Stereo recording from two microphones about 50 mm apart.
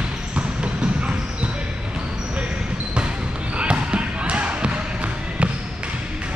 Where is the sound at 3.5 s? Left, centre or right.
Right.